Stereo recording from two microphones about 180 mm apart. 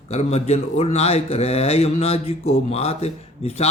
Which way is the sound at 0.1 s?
35° left (ahead or behind).